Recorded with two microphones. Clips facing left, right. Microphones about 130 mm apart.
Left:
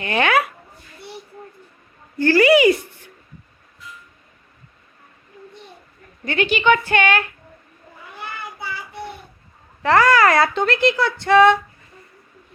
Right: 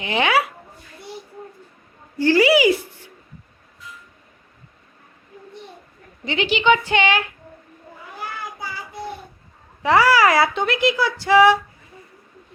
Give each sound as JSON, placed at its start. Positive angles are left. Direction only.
{"t": 0.0, "sound": "a woman's voice", "side_deg": -15}
{"t": 2.1, "sound": "a woman's voice", "side_deg": -10}
{"t": 6.2, "sound": "a woman's voice", "side_deg": -15}
{"t": 9.8, "sound": "speech", "side_deg": -10}